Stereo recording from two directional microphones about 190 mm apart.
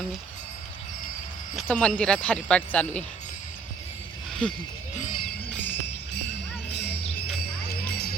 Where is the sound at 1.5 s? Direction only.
5° left (ahead or behind).